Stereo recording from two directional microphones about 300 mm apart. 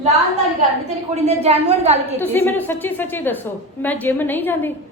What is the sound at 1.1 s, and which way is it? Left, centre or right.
A woman's voice, right.